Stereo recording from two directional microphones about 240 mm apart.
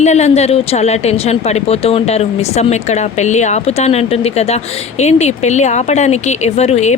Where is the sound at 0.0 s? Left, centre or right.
Left.